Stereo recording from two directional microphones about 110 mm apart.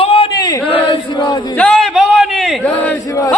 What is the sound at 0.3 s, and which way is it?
Chant, 35° left (ahead or behind).